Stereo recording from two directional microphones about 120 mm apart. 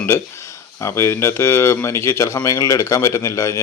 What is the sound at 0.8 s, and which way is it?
Speech, 25° left (ahead or behind).